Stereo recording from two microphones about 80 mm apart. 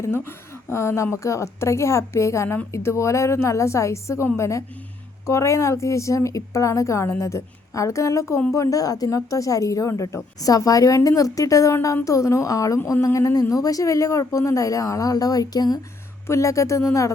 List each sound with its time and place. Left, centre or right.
0.0 s a woman's voice: left
10.4 s speech: left
16.2 s a woman's voice: left